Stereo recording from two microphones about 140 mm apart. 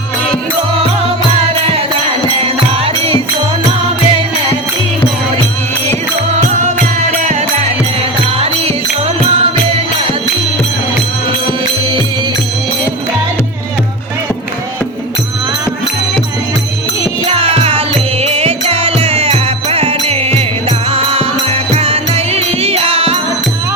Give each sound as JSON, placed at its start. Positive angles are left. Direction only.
{"t": 6.3, "sound": "music", "side_deg": -60}
{"t": 9.4, "sound": "music", "side_deg": -45}
{"t": 17.2, "sound": "music", "side_deg": -40}